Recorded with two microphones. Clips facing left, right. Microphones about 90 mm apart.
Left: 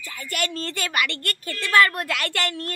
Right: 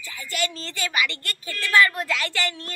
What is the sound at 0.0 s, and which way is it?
Speech, 50° left (ahead or behind).